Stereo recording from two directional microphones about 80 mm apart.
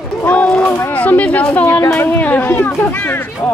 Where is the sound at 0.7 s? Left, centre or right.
Left.